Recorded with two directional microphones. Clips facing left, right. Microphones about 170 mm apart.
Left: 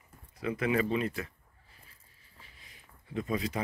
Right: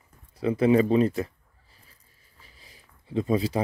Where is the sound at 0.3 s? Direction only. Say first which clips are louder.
Right 10 dB; 30° right (ahead or behind).